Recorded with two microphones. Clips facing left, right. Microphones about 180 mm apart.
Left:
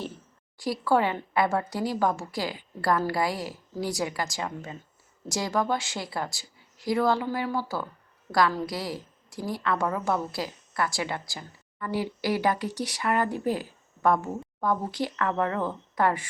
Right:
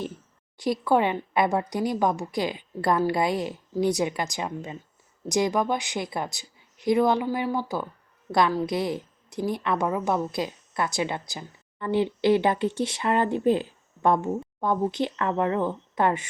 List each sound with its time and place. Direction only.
0.5 s a woman's voice: 20° right (ahead or behind)